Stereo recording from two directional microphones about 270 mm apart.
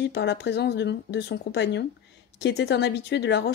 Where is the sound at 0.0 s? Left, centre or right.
Left.